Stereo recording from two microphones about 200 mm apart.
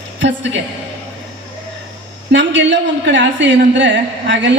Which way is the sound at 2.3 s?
65° right (ahead or behind).